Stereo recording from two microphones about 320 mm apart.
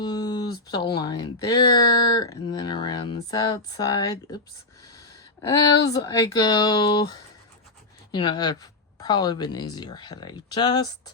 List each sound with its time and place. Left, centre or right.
0.0 s speech: centre
8.1 s speech: centre